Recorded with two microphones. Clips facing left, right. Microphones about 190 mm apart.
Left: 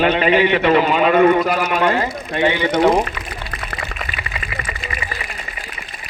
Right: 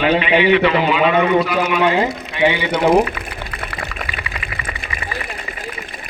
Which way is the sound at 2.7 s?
60° right (ahead or behind).